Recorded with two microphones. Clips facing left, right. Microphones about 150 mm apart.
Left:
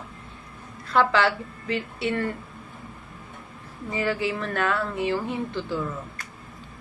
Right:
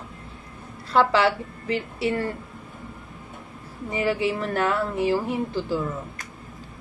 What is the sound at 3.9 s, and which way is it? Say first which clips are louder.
A woman's voice: right 2 dB; 25° right (ahead or behind).